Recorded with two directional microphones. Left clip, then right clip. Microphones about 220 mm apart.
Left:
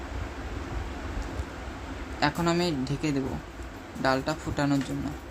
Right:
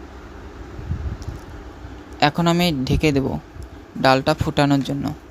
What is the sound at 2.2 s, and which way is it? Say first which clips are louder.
Speech: right 8 dB; 35° right (ahead or behind).